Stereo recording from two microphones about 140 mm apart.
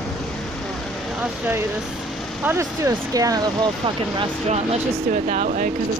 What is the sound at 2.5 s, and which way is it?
Speech, 20° right (ahead or behind).